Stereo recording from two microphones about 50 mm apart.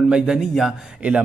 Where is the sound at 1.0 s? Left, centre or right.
Right.